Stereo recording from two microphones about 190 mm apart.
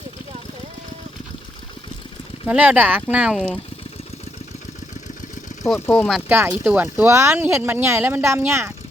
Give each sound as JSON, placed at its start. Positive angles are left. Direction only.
{"t": 2.5, "sound": "speech", "side_deg": -10}
{"t": 5.8, "sound": "speech", "side_deg": 10}
{"t": 6.1, "sound": "speech", "side_deg": -5}